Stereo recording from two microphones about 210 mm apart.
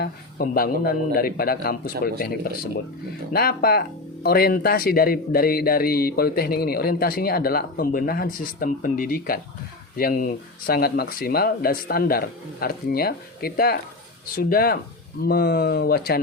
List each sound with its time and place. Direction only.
0.0 s speech: 45° left (ahead or behind)